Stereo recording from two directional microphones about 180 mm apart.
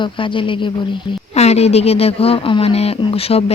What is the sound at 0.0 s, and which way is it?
Speech, 25° left (ahead or behind).